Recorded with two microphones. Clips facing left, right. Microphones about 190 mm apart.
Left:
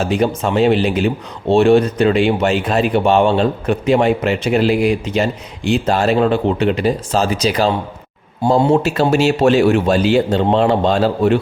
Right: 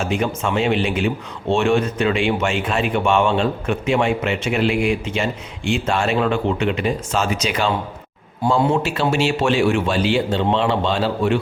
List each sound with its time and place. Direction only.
0.0 s speech: 35° left (ahead or behind)